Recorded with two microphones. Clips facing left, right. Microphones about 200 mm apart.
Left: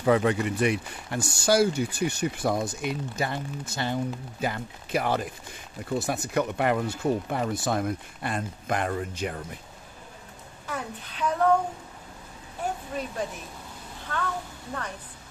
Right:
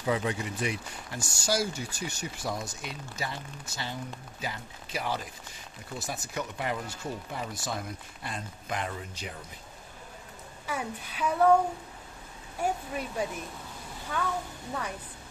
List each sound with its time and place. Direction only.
0.0 s speech: 60° left (ahead or behind)
10.7 s a woman's voice: 10° right (ahead or behind)
12.6 s a woman's voice: 10° right (ahead or behind)